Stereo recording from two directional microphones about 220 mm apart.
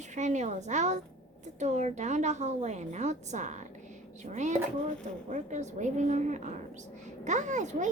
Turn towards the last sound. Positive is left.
turn(degrees=-35)  # may be behind; listen again after turning